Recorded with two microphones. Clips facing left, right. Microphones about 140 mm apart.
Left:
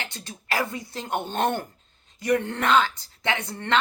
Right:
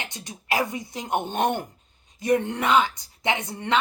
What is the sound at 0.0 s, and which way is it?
A woman's voice, 15° right (ahead or behind).